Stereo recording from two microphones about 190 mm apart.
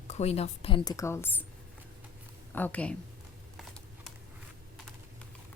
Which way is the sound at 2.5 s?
10° left (ahead or behind).